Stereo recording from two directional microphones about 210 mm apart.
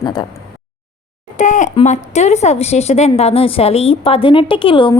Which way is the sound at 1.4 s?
35° left (ahead or behind).